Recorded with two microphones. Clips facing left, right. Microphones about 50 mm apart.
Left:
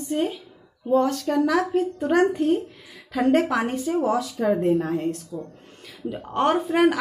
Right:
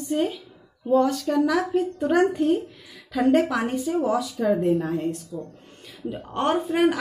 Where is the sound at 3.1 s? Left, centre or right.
Left.